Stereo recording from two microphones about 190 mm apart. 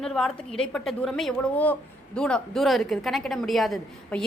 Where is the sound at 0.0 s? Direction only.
Centre (ahead or behind).